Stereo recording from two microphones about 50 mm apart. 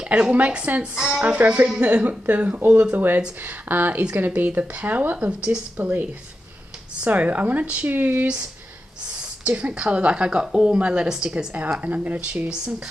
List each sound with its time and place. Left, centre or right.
0.0 s a woman's voice: right
0.9 s a woman's voice: centre
1.2 s a woman's voice: right
7.0 s speech: right
9.6 s a woman's voice: right
11.8 s speech: right